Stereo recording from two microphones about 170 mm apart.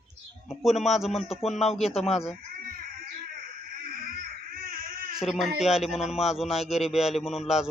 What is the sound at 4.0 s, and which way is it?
Baby cry, 55° right (ahead or behind).